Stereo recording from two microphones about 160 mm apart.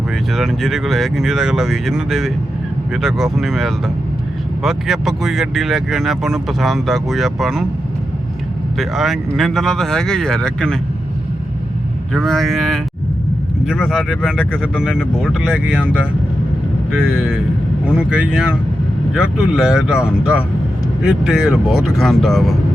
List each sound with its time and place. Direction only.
0.3 s speech: centre (ahead or behind)
8.8 s speech: centre (ahead or behind)
12.1 s speech: centre (ahead or behind)
17.8 s speech: 5° right (ahead or behind)